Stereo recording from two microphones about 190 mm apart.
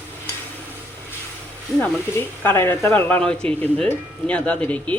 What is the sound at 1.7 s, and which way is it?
Speech, 10° left (ahead or behind).